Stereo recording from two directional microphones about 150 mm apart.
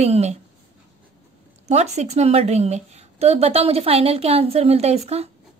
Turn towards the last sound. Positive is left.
turn(degrees=-45)  # may be behind; listen again after turning